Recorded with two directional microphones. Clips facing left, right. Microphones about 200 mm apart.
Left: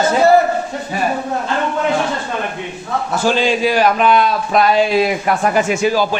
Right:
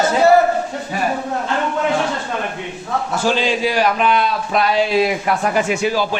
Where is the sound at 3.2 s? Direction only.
50° left (ahead or behind).